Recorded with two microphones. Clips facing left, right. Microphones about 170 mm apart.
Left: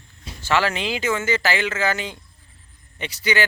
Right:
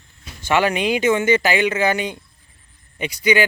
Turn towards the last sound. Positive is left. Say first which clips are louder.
# right 5 dB
turn(degrees=-15)  # may be behind; listen again after turning